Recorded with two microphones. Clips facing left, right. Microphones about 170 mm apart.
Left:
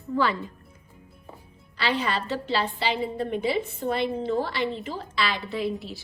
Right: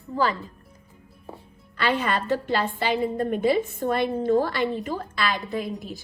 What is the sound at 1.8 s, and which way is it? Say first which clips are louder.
A woman's voice: right 2 dB; 50° right (ahead or behind).